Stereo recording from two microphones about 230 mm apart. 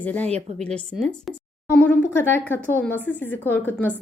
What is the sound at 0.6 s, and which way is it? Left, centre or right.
A woman's voice, centre.